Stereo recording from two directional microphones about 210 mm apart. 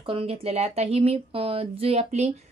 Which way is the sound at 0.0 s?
25° right (ahead or behind).